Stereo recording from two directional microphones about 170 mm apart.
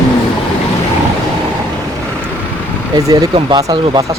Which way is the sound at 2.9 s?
20° right (ahead or behind).